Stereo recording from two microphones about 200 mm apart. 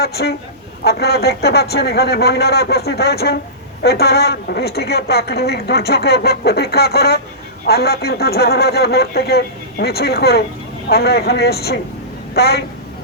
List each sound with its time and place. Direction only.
0.0 s a woman's voice: 55° left (ahead or behind)